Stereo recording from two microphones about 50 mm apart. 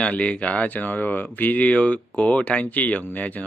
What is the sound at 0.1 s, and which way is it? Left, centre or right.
Speech, left.